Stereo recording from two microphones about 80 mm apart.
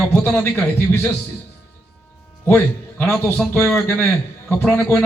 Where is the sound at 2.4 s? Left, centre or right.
Left.